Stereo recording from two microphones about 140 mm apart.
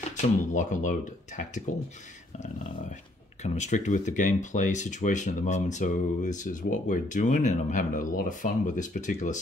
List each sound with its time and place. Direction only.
0.1 s speech: 65° left (ahead or behind)
3.4 s speech: 55° left (ahead or behind)